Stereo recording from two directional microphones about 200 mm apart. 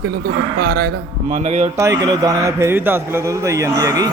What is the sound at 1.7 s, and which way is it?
A man's voice, 15° right (ahead or behind).